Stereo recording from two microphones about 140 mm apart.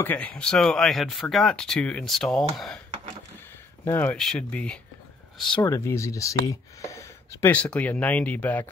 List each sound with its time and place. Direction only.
0.0 s speech: 10° left (ahead or behind)
3.8 s speech: 15° left (ahead or behind)
5.6 s speech: 20° left (ahead or behind)